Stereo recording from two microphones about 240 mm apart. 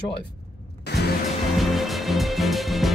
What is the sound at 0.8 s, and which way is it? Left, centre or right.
Music, left.